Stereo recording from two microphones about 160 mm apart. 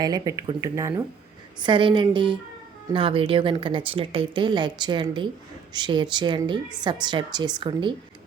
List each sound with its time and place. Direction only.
0.0 s a woman's voice: 25° right (ahead or behind)
1.6 s a woman's voice: 30° right (ahead or behind)